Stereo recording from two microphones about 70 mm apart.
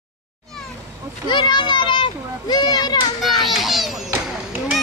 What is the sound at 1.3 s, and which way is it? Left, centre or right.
Speech, left.